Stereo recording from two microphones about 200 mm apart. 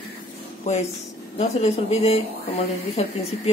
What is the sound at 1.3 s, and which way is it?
Speech, 30° left (ahead or behind).